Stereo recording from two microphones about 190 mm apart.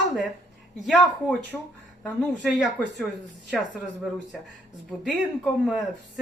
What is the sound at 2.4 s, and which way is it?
Speech, centre (ahead or behind).